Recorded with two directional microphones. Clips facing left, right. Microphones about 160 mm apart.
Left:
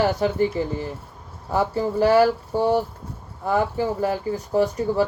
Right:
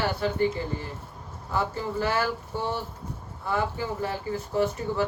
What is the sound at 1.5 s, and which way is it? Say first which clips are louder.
Speech: left 7 dB; 40° left (ahead or behind).